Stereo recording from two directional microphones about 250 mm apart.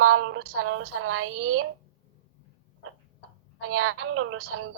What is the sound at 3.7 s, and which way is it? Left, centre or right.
Speech, right.